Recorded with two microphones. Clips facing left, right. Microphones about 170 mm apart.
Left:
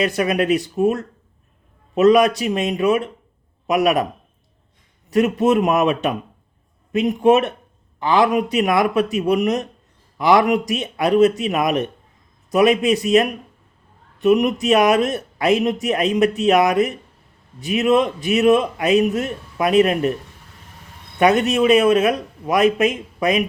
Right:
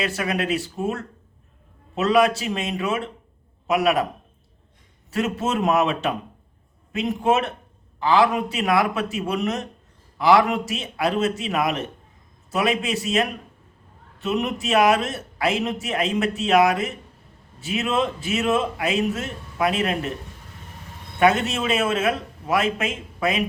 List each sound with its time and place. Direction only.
0.0 s speech: 20° left (ahead or behind)
5.1 s speech: 15° left (ahead or behind)
21.2 s speech: 15° left (ahead or behind)